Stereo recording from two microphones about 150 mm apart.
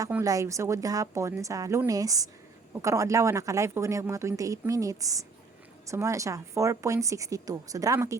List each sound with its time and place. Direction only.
0.1 s speech: 20° right (ahead or behind)